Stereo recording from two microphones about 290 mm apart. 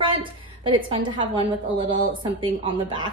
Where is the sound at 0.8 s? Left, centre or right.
Centre.